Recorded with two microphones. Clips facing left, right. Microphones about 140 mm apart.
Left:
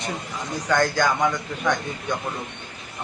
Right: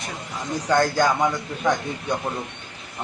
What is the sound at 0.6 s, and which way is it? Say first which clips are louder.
Speech: right 2 dB; 30° right (ahead or behind).